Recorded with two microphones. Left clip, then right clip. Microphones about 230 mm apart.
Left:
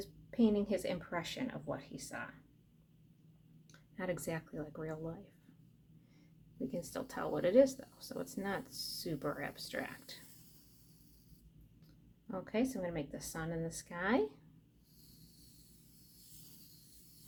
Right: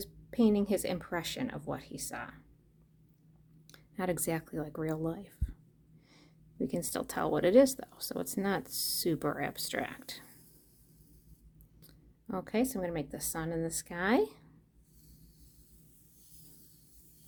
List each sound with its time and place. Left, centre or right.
0.0 s speech: right
3.7 s speech: right
12.3 s speech: right